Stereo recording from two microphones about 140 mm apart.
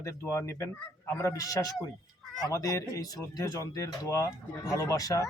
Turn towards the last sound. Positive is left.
turn(degrees=25)  # may be behind; listen again after turning